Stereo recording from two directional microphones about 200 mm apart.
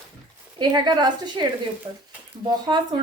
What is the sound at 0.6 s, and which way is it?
Speech, 20° right (ahead or behind).